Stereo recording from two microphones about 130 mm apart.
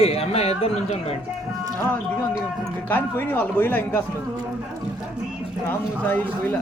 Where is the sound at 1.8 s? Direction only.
15° left (ahead or behind).